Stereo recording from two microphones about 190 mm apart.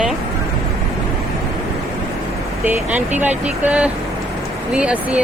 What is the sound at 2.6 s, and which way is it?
Speech, 10° right (ahead or behind).